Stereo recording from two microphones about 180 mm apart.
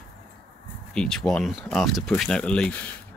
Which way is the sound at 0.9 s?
Centre (ahead or behind).